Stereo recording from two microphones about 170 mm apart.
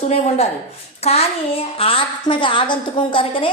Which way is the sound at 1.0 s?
35° left (ahead or behind).